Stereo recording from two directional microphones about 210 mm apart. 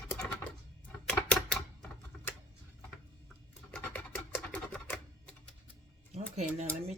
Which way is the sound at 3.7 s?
5° left (ahead or behind).